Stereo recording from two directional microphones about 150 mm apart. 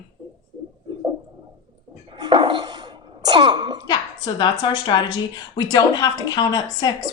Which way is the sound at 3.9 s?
30° left (ahead or behind).